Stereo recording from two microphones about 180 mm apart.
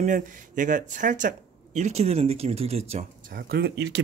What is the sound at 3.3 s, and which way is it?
Speech, 55° right (ahead or behind).